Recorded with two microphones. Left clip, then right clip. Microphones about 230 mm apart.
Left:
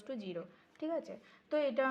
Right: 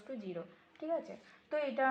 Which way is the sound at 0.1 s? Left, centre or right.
Left.